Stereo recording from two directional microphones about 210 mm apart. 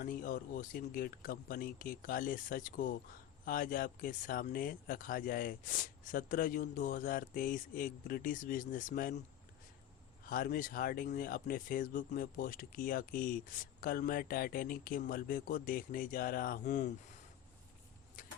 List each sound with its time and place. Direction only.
0.0 s speech: 40° left (ahead or behind)
10.2 s speech: 45° left (ahead or behind)
18.2 s vehicle: 40° left (ahead or behind)